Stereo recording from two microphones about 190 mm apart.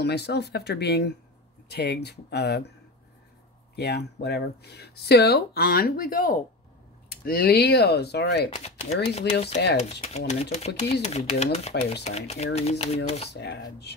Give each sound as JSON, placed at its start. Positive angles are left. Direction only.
{"t": 0.0, "sound": "speech", "side_deg": 60}
{"t": 3.7, "sound": "speech", "side_deg": 60}
{"t": 8.5, "sound": "speech", "side_deg": 35}
{"t": 13.3, "sound": "speech", "side_deg": 60}